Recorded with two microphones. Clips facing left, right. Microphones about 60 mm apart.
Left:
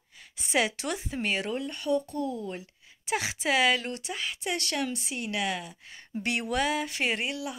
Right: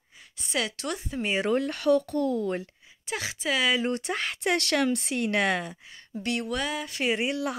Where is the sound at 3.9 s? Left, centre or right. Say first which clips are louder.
Right 5 dB; right.